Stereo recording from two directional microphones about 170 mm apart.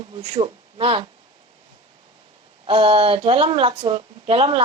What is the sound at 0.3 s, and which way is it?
Speech, 30° right (ahead or behind).